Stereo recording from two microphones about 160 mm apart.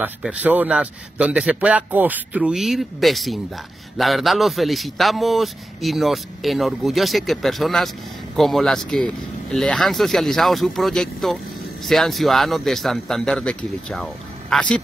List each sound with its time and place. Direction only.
0.2 s a man's voice: 10° right (ahead or behind)